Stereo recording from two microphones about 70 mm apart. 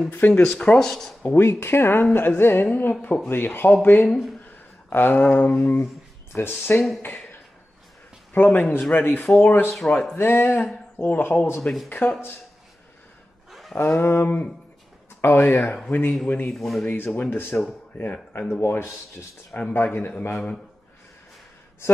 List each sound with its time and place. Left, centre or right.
0.3 s speech: centre
1.2 s speech: left
8.3 s speech: left
11.6 s speech: centre
13.5 s a sound: centre
13.7 s speech: left
16.5 s speech: centre
16.8 s speech: left